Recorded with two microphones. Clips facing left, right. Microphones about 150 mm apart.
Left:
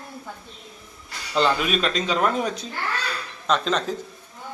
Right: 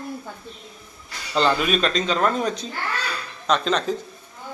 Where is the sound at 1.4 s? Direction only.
Centre (ahead or behind).